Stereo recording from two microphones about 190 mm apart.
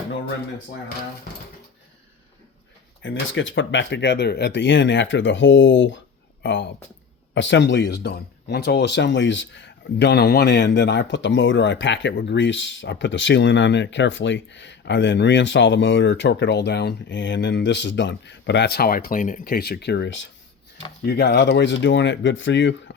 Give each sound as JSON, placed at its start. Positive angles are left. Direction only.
{"t": 3.0, "sound": "speech", "side_deg": 80}
{"t": 21.0, "sound": "speech", "side_deg": 55}